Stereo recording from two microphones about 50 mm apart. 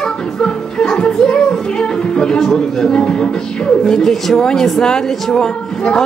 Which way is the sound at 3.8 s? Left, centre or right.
Centre.